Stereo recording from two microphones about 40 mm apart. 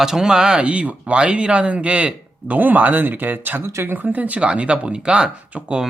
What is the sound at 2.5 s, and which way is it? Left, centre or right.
Speech, right.